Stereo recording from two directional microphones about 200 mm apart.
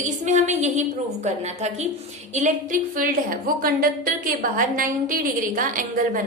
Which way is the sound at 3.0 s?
45° right (ahead or behind).